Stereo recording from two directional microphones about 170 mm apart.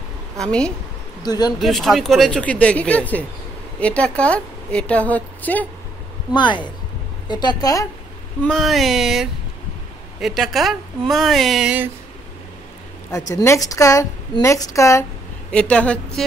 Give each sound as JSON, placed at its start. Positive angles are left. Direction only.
{"t": 0.4, "sound": "speech", "side_deg": 5}
{"t": 1.2, "sound": "a woman's voice", "side_deg": 25}
{"t": 1.6, "sound": "a woman's voice", "side_deg": 0}
{"t": 6.3, "sound": "a woman's voice", "side_deg": 25}
{"t": 8.4, "sound": "speech", "side_deg": 5}
{"t": 13.3, "sound": "a woman's voice", "side_deg": 15}
{"t": 15.5, "sound": "a woman's voice", "side_deg": 5}